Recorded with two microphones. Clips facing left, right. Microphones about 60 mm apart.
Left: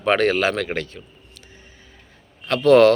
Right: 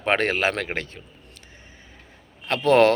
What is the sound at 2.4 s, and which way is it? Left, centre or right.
Speech, right.